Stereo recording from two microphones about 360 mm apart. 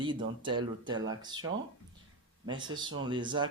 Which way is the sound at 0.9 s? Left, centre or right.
Right.